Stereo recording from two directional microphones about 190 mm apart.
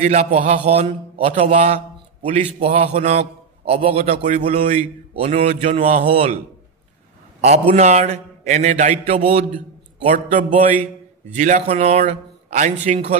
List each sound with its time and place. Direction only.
0.0 s a man's voice: 35° right (ahead or behind)
7.7 s a man's voice: 35° right (ahead or behind)